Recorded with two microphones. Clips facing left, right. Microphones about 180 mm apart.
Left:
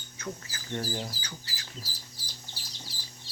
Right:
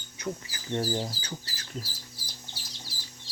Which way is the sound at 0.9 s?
35° right (ahead or behind).